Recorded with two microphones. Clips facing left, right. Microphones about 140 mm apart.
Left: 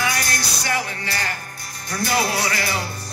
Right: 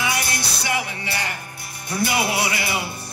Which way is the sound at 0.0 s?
25° right (ahead or behind).